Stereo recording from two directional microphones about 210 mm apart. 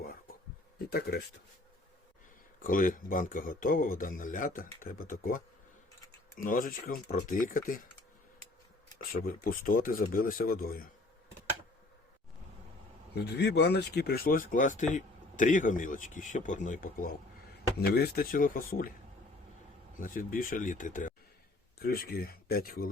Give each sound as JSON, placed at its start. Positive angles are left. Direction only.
{"t": 0.9, "sound": "speech", "side_deg": 50}
{"t": 2.6, "sound": "speech", "side_deg": 40}
{"t": 6.4, "sound": "speech", "side_deg": 40}
{"t": 9.1, "sound": "speech", "side_deg": 45}
{"t": 13.1, "sound": "speech", "side_deg": 55}
{"t": 20.0, "sound": "speech", "side_deg": 40}